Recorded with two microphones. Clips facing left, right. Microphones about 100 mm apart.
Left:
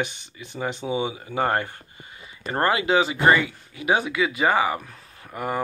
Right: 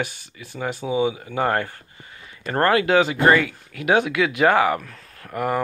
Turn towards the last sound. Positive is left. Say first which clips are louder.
# right 4 dB
turn(degrees=0)  # may be behind; listen again after turning